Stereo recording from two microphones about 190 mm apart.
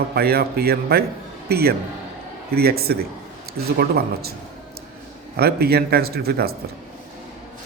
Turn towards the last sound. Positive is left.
turn(degrees=-55)  # may be behind; listen again after turning